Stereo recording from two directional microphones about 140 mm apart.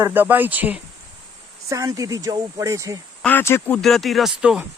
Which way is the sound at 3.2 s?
15° left (ahead or behind).